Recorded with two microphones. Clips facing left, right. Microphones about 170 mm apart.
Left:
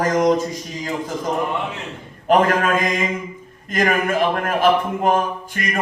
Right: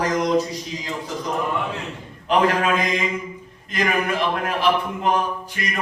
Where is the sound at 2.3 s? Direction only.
45° left (ahead or behind).